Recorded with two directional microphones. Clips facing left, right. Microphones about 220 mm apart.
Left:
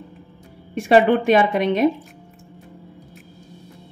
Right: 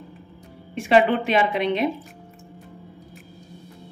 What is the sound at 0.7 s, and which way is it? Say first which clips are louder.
A woman's voice: left 3 dB; 45° left (ahead or behind).